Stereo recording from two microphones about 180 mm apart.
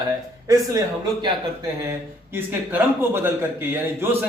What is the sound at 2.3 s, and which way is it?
Speech, 15° right (ahead or behind).